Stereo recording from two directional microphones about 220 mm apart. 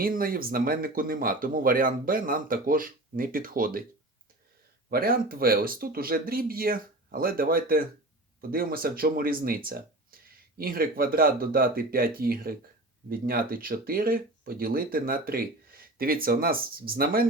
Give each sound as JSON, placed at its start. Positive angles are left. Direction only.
{"t": 0.0, "sound": "speech", "side_deg": -40}
{"t": 4.9, "sound": "speech", "side_deg": -40}